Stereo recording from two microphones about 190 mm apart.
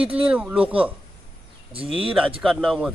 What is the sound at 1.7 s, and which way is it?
Speech, 30° right (ahead or behind).